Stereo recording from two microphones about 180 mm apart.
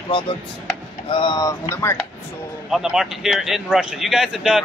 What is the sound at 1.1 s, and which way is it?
Speech, 25° left (ahead or behind).